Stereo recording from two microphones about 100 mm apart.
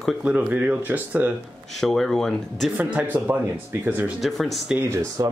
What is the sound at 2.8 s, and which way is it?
Speech, 15° right (ahead or behind).